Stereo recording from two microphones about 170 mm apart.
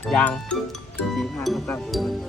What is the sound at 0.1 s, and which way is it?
Speech, 5° left (ahead or behind).